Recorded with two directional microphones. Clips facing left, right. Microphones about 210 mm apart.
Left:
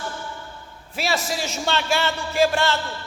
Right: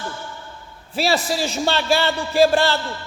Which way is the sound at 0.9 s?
35° right (ahead or behind).